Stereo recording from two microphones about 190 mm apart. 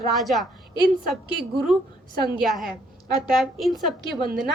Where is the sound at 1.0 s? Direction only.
55° right (ahead or behind).